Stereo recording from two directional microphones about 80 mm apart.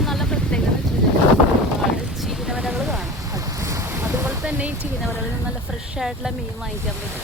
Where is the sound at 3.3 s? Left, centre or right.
Right.